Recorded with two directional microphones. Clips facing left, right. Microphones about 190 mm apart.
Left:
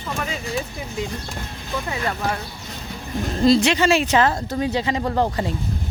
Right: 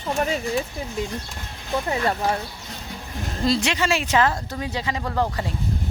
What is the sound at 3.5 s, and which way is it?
Speech, 30° left (ahead or behind).